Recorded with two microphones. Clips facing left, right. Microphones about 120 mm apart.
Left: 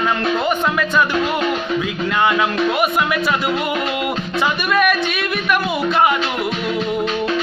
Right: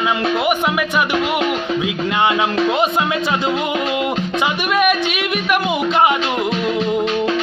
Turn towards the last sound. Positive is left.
turn(degrees=-20)  # may be behind; listen again after turning